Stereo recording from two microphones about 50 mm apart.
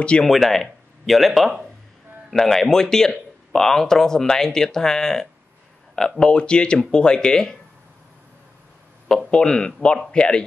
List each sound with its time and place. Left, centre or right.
0.2 s speech: centre
9.3 s speech: centre